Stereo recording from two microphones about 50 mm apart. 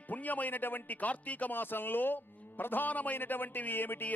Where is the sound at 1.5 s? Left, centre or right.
Left.